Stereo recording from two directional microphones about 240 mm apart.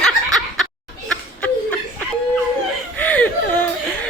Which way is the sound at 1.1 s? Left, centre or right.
Centre.